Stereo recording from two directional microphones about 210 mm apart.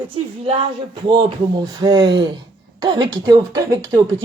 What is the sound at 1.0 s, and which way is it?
A woman's voice, 20° right (ahead or behind).